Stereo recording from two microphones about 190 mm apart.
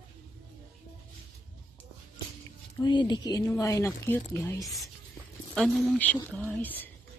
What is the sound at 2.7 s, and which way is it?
Speech, 25° left (ahead or behind).